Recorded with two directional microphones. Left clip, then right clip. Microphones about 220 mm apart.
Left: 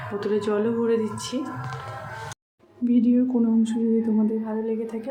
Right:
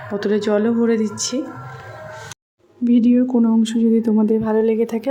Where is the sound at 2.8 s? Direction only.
35° right (ahead or behind).